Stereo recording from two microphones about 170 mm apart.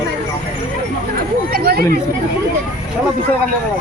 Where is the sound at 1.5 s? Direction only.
65° right (ahead or behind).